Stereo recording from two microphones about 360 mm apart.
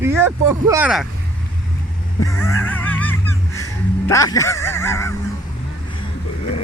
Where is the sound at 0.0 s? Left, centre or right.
Centre.